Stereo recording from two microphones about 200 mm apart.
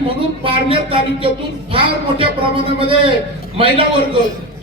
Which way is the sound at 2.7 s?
25° right (ahead or behind).